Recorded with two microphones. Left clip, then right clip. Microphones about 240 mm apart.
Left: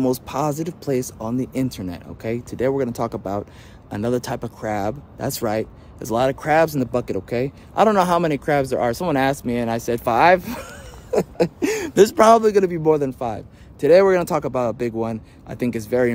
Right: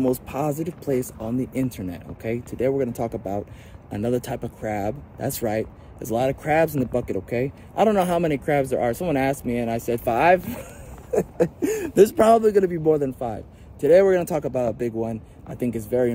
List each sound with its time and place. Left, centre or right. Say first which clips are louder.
0.0 s speech: left 2 dB; left
0.6 s speech: left 2 dB; centre
11.3 s a sound: left 2 dB; centre
12.2 s speech: left 3 dB; centre